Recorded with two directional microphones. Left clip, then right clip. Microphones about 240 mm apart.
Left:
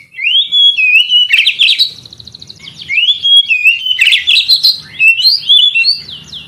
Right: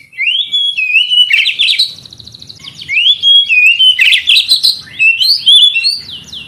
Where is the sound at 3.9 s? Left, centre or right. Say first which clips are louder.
Right 1 dB; centre.